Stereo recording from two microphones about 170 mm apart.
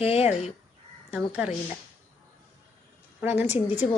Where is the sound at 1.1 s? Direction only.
5° right (ahead or behind).